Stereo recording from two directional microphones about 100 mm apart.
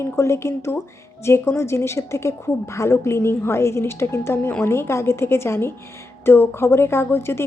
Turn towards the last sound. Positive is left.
turn(degrees=25)  # may be behind; listen again after turning